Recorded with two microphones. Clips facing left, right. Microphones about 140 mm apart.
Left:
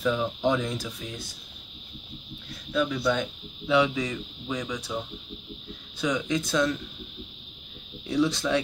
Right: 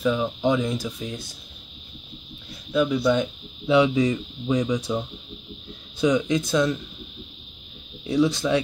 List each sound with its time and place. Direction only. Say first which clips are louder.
0.0 s speech: right 3 dB; 5° right (ahead or behind)
2.7 s speech: right 5 dB; 10° right (ahead or behind)
8.1 s speech: right 4 dB; 10° right (ahead or behind)